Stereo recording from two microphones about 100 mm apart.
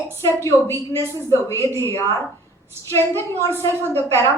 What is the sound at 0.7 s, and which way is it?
Speech, 25° right (ahead or behind).